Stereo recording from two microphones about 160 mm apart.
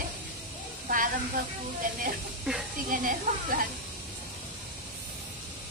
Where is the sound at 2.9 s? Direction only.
60° right (ahead or behind).